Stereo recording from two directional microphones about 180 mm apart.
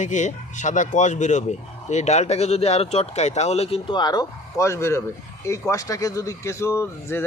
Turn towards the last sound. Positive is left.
turn(degrees=15)  # may be behind; listen again after turning